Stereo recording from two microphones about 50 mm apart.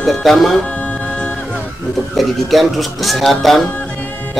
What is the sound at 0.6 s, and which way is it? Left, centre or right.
Music, left.